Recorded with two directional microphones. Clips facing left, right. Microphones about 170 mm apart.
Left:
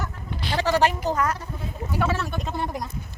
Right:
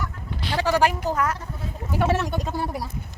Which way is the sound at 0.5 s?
10° right (ahead or behind).